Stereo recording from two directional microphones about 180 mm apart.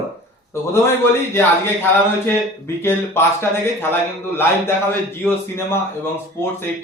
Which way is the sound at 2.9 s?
15° left (ahead or behind).